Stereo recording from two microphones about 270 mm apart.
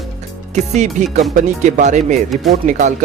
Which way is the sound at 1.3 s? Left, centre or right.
Right.